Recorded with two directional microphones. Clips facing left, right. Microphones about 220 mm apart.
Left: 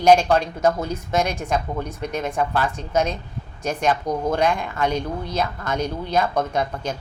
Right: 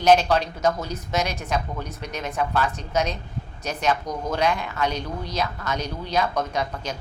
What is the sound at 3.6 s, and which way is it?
A woman's voice, 50° left (ahead or behind).